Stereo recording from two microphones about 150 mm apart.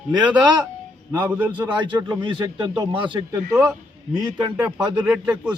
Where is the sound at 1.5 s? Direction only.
30° right (ahead or behind).